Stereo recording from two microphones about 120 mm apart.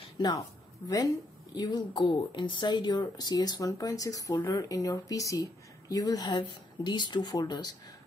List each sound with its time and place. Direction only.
0.2 s speech: 35° left (ahead or behind)
1.5 s speech: 35° left (ahead or behind)